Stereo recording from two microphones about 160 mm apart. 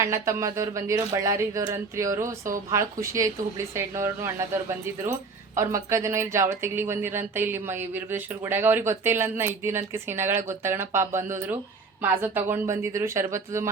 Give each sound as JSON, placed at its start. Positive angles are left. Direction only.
{"t": 0.0, "sound": "speech", "side_deg": -20}
{"t": 5.5, "sound": "speech", "side_deg": -20}